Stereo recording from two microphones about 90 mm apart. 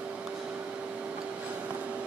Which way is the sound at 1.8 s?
15° right (ahead or behind).